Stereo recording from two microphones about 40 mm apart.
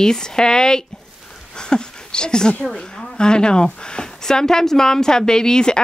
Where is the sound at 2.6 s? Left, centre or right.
Centre.